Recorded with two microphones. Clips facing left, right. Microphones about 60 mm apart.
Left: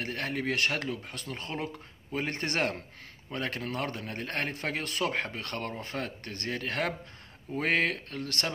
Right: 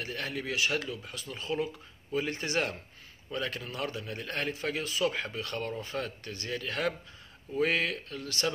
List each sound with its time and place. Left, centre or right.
0.0 s speech: left